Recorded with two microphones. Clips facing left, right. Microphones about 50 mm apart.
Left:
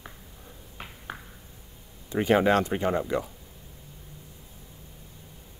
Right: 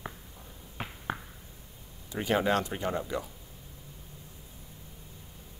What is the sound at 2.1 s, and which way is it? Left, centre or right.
Speech, left.